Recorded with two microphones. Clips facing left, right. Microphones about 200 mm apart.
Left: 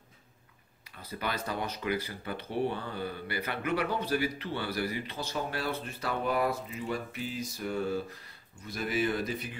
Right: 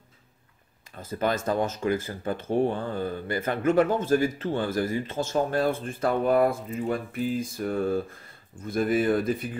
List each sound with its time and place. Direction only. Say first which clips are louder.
0.9 s speech: right 9 dB; 45° right (ahead or behind)